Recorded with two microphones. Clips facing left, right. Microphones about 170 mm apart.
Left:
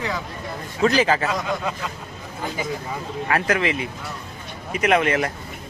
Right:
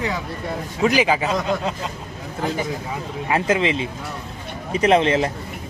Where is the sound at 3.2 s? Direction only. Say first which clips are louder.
Right 2 dB; 20° right (ahead or behind).